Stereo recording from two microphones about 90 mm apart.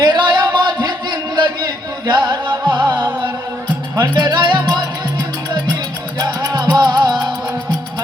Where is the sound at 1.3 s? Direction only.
55° right (ahead or behind).